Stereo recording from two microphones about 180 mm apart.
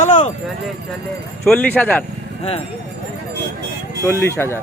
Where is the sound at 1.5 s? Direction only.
10° left (ahead or behind).